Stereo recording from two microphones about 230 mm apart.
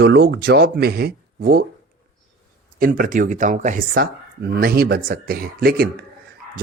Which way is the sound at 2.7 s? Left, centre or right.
Right.